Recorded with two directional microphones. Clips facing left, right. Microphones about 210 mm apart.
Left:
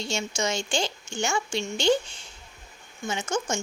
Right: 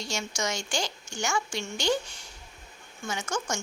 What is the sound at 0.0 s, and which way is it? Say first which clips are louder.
A woman's voice: left 4 dB; 25° left (ahead or behind).